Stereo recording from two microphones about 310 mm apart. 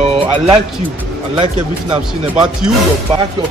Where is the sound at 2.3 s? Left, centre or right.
Centre.